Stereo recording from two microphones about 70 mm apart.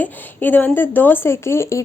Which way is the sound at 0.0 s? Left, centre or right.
Left.